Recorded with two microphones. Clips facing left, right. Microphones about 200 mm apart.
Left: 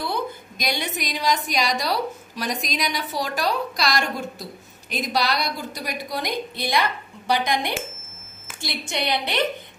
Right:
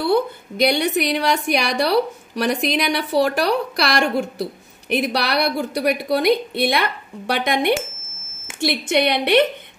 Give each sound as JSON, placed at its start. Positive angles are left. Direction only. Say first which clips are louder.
{"t": 0.6, "sound": "a woman's voice", "louder": "right 10 dB", "side_deg": -65}